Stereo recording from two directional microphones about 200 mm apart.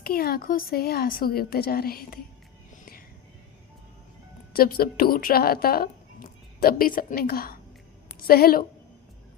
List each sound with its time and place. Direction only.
0.0 s a woman's voice: 50° left (ahead or behind)
4.5 s a woman's voice: 50° left (ahead or behind)